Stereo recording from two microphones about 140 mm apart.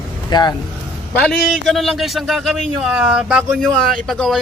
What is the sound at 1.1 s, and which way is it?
A man's voice, 10° left (ahead or behind).